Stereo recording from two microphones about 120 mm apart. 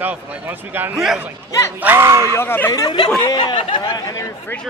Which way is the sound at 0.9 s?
5° right (ahead or behind).